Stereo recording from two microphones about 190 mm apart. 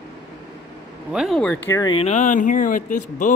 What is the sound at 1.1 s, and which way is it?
Speech, centre (ahead or behind).